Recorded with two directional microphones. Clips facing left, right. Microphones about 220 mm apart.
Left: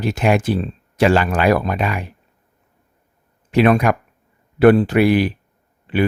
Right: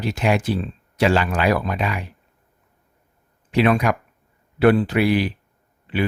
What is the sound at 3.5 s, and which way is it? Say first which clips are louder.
Speech: left 4 dB; 50° left (ahead or behind).